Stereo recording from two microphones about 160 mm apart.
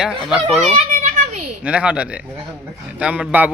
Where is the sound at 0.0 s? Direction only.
Centre (ahead or behind).